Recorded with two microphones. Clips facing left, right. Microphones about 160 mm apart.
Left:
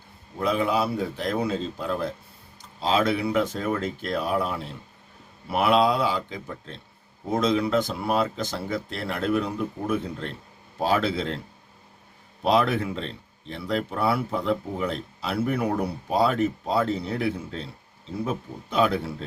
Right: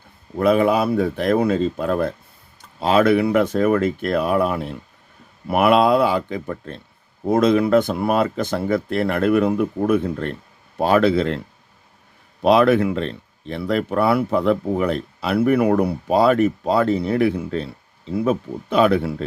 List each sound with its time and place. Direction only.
0.3 s speech: 60° right (ahead or behind)
12.4 s speech: 70° right (ahead or behind)